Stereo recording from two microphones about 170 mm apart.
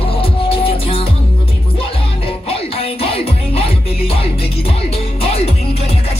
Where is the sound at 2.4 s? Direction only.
35° left (ahead or behind).